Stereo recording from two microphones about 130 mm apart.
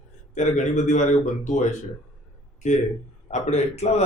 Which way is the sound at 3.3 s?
60° left (ahead or behind).